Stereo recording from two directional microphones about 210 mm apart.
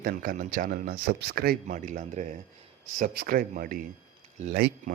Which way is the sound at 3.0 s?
45° right (ahead or behind).